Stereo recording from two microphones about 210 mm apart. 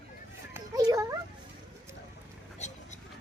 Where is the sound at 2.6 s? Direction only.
35° left (ahead or behind).